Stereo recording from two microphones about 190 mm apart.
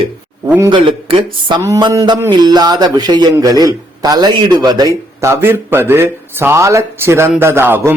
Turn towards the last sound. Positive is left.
turn(degrees=-10)  # may be behind; listen again after turning